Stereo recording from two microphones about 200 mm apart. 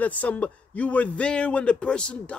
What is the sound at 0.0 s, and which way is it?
Speech, 5° left (ahead or behind).